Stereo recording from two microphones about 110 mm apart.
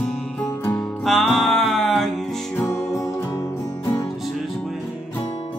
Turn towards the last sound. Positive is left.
turn(degrees=25)  # may be behind; listen again after turning